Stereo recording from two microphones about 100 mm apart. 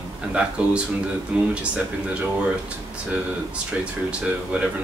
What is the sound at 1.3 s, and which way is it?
Speech, 10° right (ahead or behind).